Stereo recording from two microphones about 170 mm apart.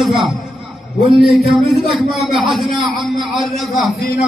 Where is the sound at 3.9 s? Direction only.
70° left (ahead or behind).